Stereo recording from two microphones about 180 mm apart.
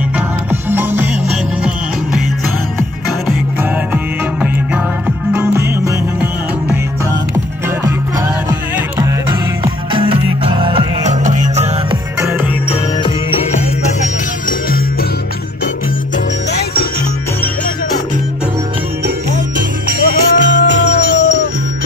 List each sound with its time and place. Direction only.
0.5 s music: 10° right (ahead or behind)
5.0 s music: 10° right (ahead or behind)
8.7 s music: 15° right (ahead or behind)
9.9 s music: 30° right (ahead or behind)
11.2 s music: 40° right (ahead or behind)
19.9 s music: 70° right (ahead or behind); by 21.5 s 90° right